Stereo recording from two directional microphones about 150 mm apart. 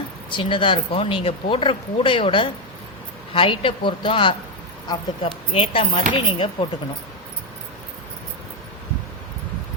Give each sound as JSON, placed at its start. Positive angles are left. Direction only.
{"t": 0.3, "sound": "speech", "side_deg": 35}